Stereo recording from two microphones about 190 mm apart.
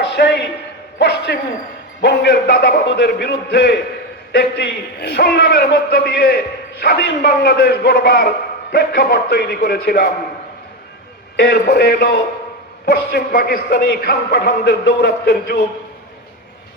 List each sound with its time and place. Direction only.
0.0 s a sound: 65° left (ahead or behind)
2.0 s a man's voice: 60° left (ahead or behind)
11.3 s a man's voice: 55° left (ahead or behind)